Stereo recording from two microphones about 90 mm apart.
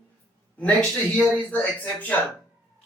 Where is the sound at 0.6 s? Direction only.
10° left (ahead or behind).